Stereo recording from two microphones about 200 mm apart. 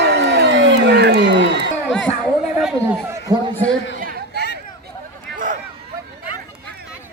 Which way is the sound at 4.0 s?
45° right (ahead or behind).